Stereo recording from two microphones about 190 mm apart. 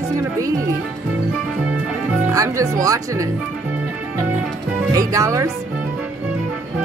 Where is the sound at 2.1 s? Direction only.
10° right (ahead or behind).